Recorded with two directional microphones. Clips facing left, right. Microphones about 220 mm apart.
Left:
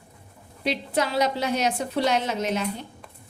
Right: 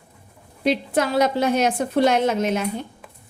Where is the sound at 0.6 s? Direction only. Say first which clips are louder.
Right 5 dB; 50° right (ahead or behind).